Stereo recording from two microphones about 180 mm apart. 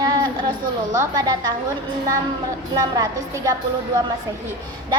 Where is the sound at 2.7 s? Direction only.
20° right (ahead or behind).